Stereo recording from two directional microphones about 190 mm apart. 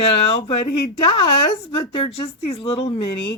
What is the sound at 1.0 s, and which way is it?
Speech, 30° left (ahead or behind).